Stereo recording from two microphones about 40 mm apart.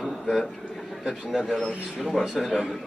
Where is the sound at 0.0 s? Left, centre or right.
Centre.